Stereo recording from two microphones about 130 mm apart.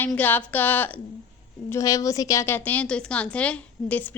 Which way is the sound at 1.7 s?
25° left (ahead or behind).